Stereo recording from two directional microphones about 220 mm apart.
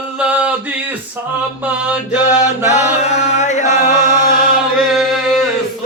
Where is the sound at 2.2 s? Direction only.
30° left (ahead or behind).